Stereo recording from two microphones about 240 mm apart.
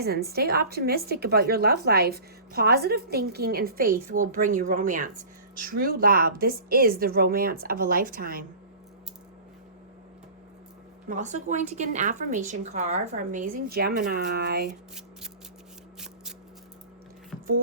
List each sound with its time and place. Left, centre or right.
0.0 s a woman's voice: right
11.1 s a woman's voice: right
14.7 s speech: centre